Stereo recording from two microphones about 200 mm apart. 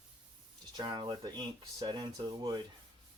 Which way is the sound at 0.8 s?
20° right (ahead or behind).